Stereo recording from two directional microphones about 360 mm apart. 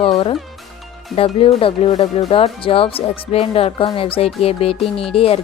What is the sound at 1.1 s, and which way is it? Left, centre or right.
Speech, centre.